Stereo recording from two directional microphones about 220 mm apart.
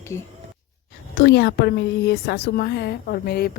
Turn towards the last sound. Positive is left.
turn(degrees=45)  # may be behind; listen again after turning